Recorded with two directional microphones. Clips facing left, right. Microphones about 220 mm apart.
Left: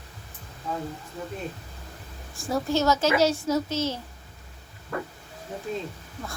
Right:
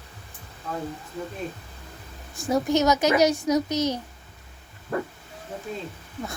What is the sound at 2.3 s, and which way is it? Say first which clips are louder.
A woman's voice: right 3 dB; 20° right (ahead or behind).